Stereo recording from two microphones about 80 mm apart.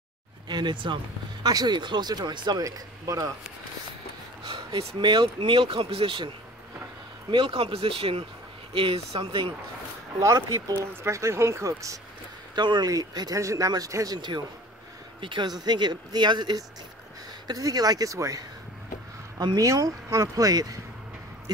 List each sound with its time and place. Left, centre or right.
0.5 s speech: right
2.6 s speech: right
4.5 s speech: right
10.9 s speech: right
12.5 s speech: right
12.9 s speech: right
13.4 s speech: right
15.1 s speech: right
17.5 s speech: right